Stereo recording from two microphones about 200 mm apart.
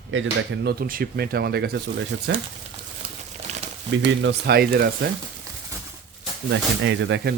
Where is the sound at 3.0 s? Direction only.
25° right (ahead or behind).